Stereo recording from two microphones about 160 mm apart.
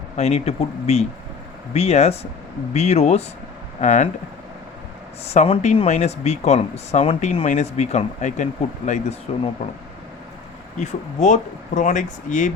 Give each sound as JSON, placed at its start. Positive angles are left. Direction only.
{"t": 0.2, "sound": "speech", "side_deg": 40}
{"t": 5.2, "sound": "speech", "side_deg": 40}
{"t": 10.8, "sound": "speech", "side_deg": 50}